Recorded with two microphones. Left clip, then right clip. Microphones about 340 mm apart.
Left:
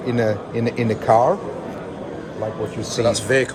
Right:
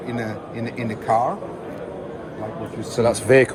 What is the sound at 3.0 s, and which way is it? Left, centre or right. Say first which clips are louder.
Speech: right 3 dB; centre.